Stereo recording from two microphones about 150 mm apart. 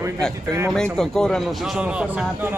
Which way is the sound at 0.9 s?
5° left (ahead or behind).